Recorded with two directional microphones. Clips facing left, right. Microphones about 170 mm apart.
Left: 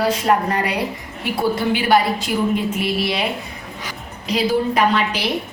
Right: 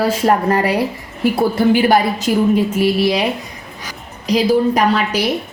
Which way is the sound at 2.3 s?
40° right (ahead or behind).